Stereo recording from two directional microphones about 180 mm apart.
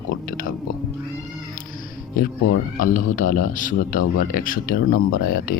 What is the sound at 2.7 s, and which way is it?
A man's voice, 50° left (ahead or behind).